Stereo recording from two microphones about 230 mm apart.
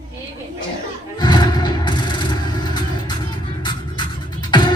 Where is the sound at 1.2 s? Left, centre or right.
Centre.